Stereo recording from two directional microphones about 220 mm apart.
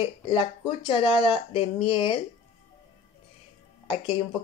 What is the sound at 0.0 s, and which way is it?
Speech, 20° left (ahead or behind).